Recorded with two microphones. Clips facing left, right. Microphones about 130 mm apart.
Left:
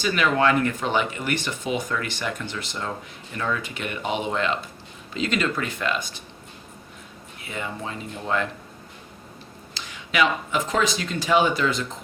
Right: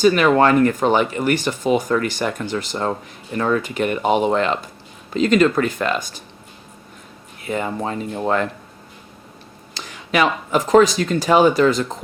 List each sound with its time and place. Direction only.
0.0 s speech: 45° right (ahead or behind)
7.4 s speech: 45° right (ahead or behind)
9.7 s speech: 45° right (ahead or behind)